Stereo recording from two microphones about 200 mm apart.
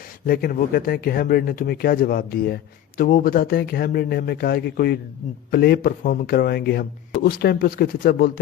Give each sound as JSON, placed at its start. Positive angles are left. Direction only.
{"t": 0.3, "sound": "speech", "side_deg": 45}